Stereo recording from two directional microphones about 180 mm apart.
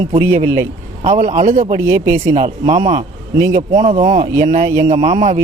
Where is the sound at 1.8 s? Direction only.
15° right (ahead or behind).